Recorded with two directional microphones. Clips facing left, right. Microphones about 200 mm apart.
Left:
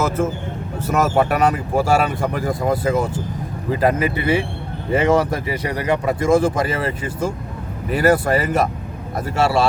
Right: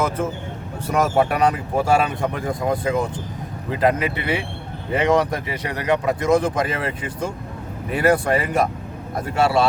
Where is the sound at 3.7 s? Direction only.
40° left (ahead or behind).